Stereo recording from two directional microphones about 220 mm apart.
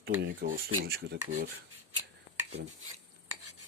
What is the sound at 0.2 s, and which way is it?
Speech, 45° right (ahead or behind).